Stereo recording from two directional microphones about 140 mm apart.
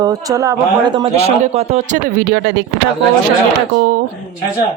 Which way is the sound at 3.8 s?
75° right (ahead or behind).